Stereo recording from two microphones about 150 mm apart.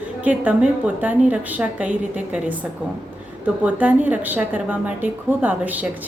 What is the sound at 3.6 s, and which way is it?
A woman's voice, 10° right (ahead or behind).